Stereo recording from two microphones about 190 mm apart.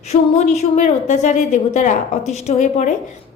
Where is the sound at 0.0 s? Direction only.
35° left (ahead or behind).